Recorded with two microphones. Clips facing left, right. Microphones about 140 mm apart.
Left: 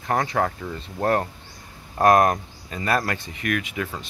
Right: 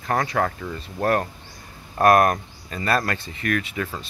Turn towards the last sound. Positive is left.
turn(degrees=15)  # may be behind; listen again after turning